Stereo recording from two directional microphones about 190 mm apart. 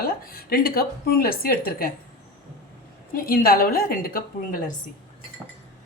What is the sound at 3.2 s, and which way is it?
A woman's voice, 50° left (ahead or behind).